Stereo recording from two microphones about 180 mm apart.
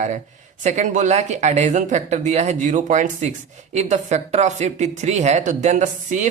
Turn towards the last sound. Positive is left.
turn(degrees=-45)  # may be behind; listen again after turning